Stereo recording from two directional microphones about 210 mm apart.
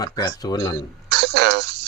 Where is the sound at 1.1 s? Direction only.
55° right (ahead or behind).